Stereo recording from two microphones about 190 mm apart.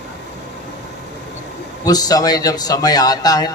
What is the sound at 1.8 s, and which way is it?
A man's voice, 20° left (ahead or behind).